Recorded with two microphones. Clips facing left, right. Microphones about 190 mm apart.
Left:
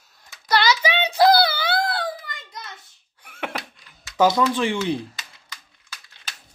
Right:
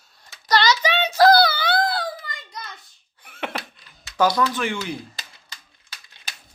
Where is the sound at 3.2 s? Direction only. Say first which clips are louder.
Even; 10° left (ahead or behind).